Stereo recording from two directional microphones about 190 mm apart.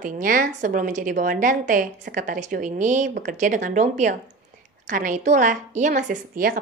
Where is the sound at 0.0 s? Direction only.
45° right (ahead or behind).